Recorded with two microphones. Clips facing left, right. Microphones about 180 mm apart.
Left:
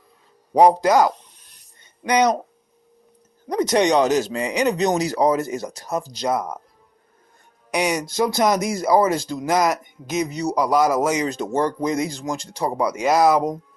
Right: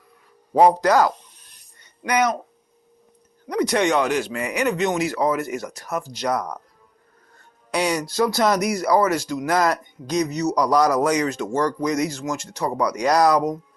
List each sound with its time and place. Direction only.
0.6 s speech: 20° left (ahead or behind)
3.7 s speech: 20° left (ahead or behind)
4.1 s speech: 35° left (ahead or behind)
7.7 s speech: 20° left (ahead or behind)
10.5 s a man's voice: 5° left (ahead or behind)
10.9 s speech: 25° left (ahead or behind)